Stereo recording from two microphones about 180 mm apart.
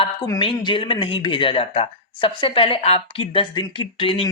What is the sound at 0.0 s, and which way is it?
Speech, 25° left (ahead or behind).